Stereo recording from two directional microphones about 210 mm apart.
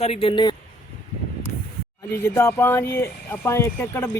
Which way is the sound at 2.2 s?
10° left (ahead or behind).